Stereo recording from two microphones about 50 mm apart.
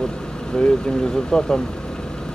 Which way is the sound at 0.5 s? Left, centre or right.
Centre.